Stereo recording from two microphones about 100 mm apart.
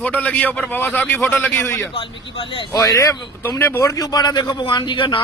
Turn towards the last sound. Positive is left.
turn(degrees=55)  # may be behind; listen again after turning